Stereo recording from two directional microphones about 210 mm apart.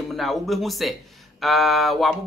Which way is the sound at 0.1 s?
Centre (ahead or behind).